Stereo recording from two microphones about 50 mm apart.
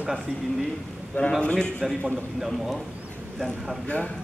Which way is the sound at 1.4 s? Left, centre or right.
Centre.